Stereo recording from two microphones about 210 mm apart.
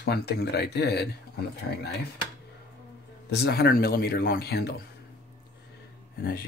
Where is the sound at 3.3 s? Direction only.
50° left (ahead or behind).